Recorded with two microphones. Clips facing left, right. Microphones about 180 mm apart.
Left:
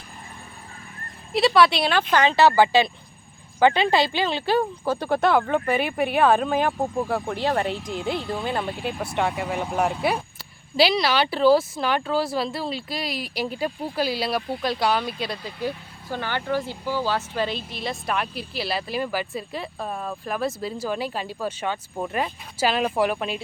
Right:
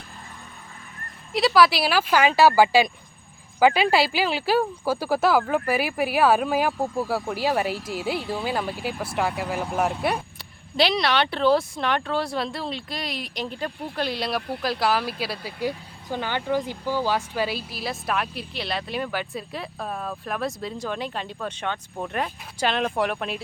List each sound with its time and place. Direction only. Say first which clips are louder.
1.3 s speech: left 1 dB; centre (ahead or behind)
6.7 s speech: left 1 dB; 15° left (ahead or behind)
7.0 s speech: even; 5° right (ahead or behind)